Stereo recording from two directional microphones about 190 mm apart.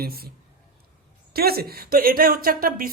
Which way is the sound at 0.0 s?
55° right (ahead or behind).